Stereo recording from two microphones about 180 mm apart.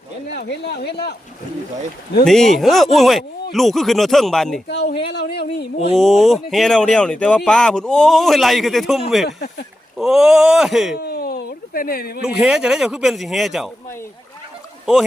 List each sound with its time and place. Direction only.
0.3 s speech: 65° left (ahead or behind)
2.2 s speech: centre (ahead or behind)
4.7 s speech: 70° left (ahead or behind)
5.9 s speech: centre (ahead or behind)
10.9 s a sound: 60° left (ahead or behind)
12.2 s speech: 5° right (ahead or behind)